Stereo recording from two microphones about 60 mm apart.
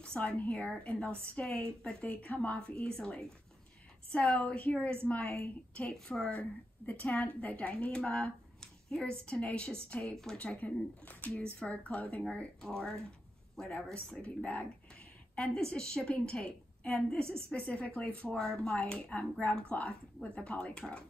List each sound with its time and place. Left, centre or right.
0.2 s a woman's voice: left
4.5 s a woman's voice: left
15.3 s a woman's voice: centre
18.8 s a woman's voice: centre